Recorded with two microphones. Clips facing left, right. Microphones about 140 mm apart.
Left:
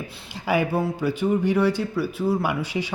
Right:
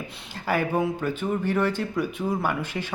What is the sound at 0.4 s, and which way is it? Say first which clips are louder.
Speech: left 2 dB; 10° left (ahead or behind).